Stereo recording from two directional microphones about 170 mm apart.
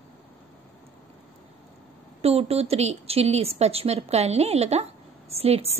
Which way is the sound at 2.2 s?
35° right (ahead or behind).